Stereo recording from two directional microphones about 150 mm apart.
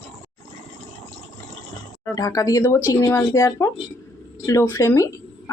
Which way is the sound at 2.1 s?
25° left (ahead or behind).